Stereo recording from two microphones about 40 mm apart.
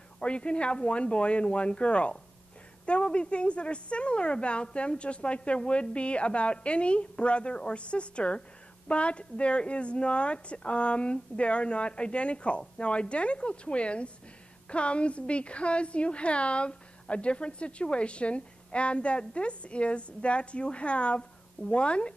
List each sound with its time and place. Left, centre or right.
0.2 s a woman's voice: left